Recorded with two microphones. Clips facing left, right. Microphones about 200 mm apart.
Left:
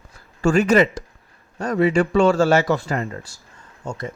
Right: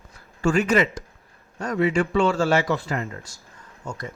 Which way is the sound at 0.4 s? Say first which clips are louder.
Left 4 dB; 40° left (ahead or behind).